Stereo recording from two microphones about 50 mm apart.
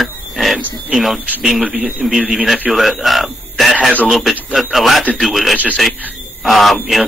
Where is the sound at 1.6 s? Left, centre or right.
Centre.